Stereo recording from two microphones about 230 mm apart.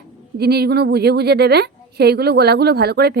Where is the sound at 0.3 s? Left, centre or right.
Right.